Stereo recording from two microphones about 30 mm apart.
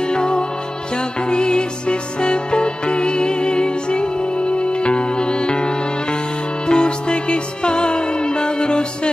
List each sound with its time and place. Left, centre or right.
0.0 s music: left